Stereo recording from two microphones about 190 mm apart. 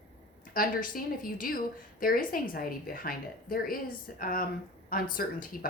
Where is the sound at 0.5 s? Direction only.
45° left (ahead or behind).